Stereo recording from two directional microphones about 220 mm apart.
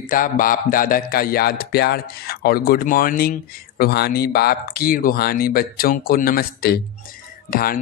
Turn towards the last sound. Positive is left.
turn(degrees=40)  # may be behind; listen again after turning